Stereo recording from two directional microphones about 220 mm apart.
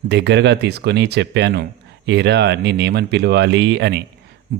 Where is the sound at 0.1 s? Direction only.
50° right (ahead or behind).